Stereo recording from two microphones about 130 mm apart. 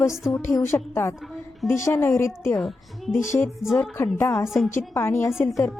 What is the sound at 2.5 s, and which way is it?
Speech, centre (ahead or behind).